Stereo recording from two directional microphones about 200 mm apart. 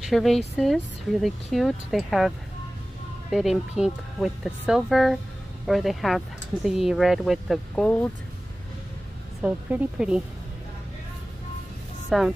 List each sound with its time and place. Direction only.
0.1 s speech: centre (ahead or behind)
9.4 s speech: 5° right (ahead or behind)
12.1 s speech: centre (ahead or behind)